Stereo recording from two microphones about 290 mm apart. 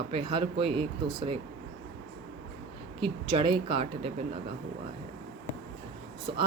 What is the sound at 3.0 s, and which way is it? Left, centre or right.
Speech, centre.